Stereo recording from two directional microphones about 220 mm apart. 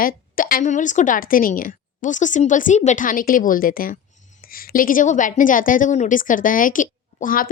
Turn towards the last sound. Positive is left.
turn(degrees=40)  # may be behind; listen again after turning